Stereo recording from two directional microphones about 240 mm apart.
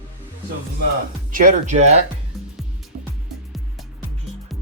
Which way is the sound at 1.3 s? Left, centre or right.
Right.